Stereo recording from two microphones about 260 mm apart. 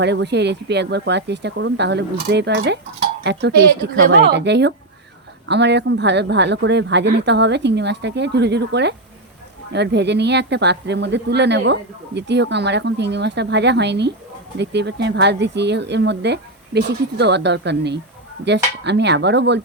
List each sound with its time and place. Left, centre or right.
0.0 s speech: right